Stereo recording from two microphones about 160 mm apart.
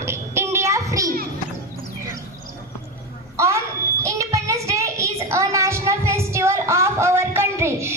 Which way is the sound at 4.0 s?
20° right (ahead or behind).